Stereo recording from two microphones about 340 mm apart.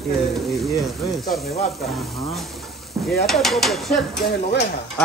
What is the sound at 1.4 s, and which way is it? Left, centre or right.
Speech, centre.